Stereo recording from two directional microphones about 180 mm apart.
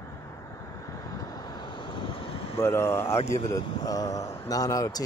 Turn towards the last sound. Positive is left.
turn(degrees=20)  # may be behind; listen again after turning